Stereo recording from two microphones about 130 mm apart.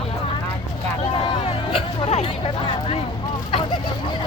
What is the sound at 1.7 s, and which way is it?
Music, 45° left (ahead or behind).